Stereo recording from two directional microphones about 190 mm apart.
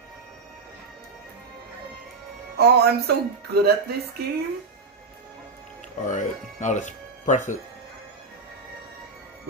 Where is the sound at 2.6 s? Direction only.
55° right (ahead or behind).